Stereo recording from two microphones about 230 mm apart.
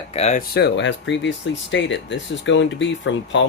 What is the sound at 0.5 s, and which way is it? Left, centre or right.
Speech, left.